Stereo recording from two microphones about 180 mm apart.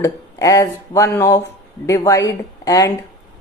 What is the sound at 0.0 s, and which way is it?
A woman's voice, 20° left (ahead or behind).